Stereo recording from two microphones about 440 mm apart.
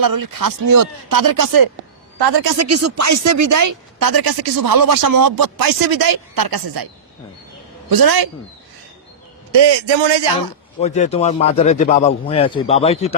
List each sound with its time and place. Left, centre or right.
0.0 s speech: right
2.1 s a woman's voice: right
2.6 s speech: right
7.9 s speech: right
9.5 s a man's voice: right
10.8 s a man's voice: centre